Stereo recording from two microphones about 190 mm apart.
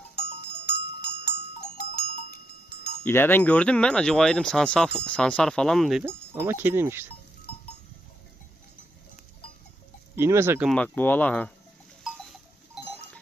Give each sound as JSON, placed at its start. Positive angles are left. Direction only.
{"t": 0.2, "sound": "goat", "side_deg": 55}
{"t": 3.0, "sound": "speech", "side_deg": 10}
{"t": 6.0, "sound": "speech", "side_deg": -10}
{"t": 10.2, "sound": "speech", "side_deg": -15}
{"t": 10.7, "sound": "speech", "side_deg": 10}
{"t": 12.0, "sound": "livestock", "side_deg": 0}